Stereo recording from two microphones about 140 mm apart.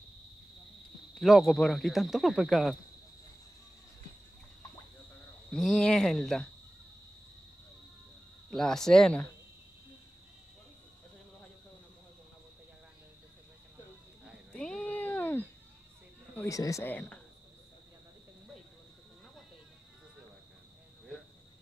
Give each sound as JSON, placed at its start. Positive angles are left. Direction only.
{"t": 1.1, "sound": "speech", "side_deg": 0}
{"t": 5.5, "sound": "speech", "side_deg": 5}
{"t": 8.5, "sound": "speech", "side_deg": 5}
{"t": 14.5, "sound": "a sound", "side_deg": 5}
{"t": 16.4, "sound": "speech", "side_deg": 25}
{"t": 16.8, "sound": "speech", "side_deg": 10}